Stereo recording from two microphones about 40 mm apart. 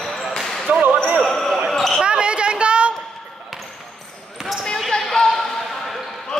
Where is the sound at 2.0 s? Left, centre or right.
Right.